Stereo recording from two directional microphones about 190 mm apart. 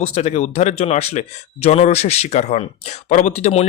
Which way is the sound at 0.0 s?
35° left (ahead or behind).